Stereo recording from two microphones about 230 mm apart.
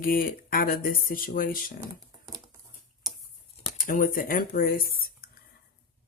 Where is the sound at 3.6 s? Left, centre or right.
Left.